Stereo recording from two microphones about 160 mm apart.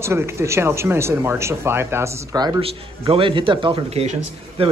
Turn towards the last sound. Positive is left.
turn(degrees=-40)  # may be behind; listen again after turning